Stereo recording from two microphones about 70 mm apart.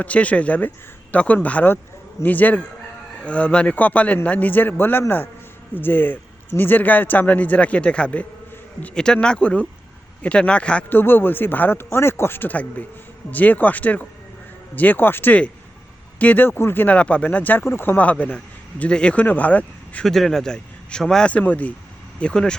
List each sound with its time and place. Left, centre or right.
0.0 s speech: centre
10.8 s speech: left
16.5 s speech: left
20.1 s speech: centre
21.2 s speech: centre